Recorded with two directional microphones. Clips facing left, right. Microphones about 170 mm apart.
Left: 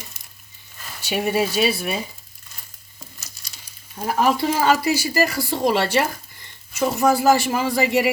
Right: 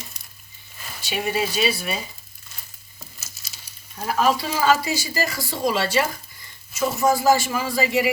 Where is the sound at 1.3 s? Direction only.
55° left (ahead or behind).